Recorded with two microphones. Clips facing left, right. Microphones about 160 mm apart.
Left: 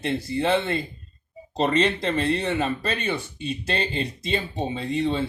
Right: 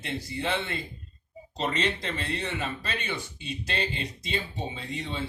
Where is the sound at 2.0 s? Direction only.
55° left (ahead or behind).